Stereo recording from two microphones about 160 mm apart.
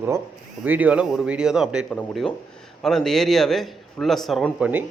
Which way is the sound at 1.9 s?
10° left (ahead or behind).